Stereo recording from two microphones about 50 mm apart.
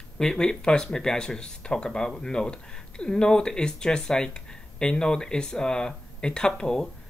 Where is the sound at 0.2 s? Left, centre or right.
Centre.